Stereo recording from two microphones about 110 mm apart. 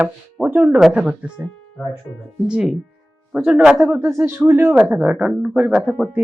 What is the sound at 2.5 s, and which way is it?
Speech, 10° right (ahead or behind).